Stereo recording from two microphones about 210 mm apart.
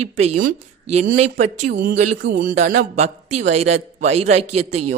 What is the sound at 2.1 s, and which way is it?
Speech, 55° right (ahead or behind).